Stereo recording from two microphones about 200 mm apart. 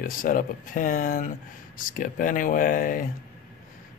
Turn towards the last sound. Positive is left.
turn(degrees=45)  # may be behind; listen again after turning